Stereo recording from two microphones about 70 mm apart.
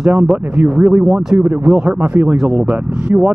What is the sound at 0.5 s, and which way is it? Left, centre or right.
Speech, centre.